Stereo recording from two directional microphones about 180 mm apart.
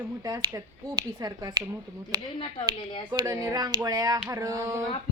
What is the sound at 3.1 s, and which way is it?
A man's voice, 20° right (ahead or behind).